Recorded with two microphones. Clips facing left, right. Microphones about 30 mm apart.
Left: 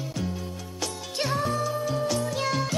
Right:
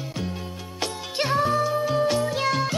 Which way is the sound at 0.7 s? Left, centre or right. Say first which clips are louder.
Right 4 dB; right.